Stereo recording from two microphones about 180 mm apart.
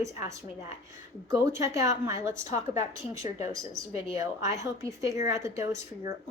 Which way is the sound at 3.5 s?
20° right (ahead or behind).